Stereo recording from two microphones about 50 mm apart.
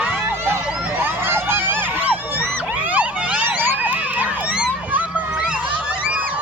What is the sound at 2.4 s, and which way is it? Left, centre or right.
Police car, right.